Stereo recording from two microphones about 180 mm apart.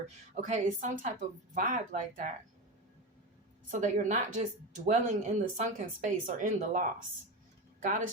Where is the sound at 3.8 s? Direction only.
45° right (ahead or behind).